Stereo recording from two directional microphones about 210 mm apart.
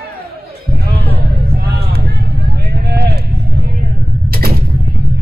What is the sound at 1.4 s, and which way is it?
Vehicle, 45° right (ahead or behind).